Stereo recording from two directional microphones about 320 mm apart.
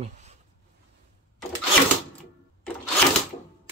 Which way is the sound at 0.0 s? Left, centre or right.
Right.